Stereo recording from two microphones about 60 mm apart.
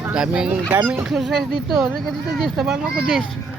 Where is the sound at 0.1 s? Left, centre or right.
Centre.